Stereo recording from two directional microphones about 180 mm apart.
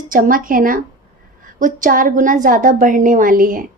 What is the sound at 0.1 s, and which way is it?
A child's voice, 50° right (ahead or behind).